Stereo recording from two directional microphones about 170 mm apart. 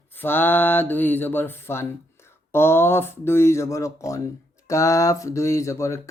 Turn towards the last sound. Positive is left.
turn(degrees=15)  # may be behind; listen again after turning